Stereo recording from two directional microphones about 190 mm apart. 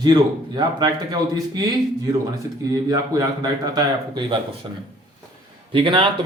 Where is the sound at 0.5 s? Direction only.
20° right (ahead or behind).